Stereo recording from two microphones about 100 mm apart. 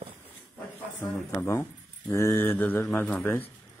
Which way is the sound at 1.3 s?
25° left (ahead or behind).